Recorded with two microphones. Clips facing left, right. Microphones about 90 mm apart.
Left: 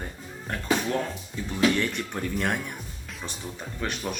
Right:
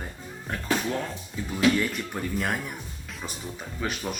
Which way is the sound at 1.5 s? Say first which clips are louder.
Right 1 dB; 5° right (ahead or behind).